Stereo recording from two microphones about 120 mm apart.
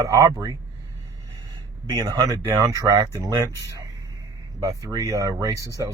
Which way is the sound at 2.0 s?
30° right (ahead or behind).